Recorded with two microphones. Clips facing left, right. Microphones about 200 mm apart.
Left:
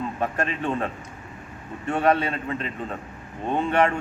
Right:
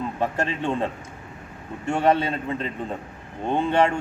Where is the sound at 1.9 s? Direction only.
30° right (ahead or behind).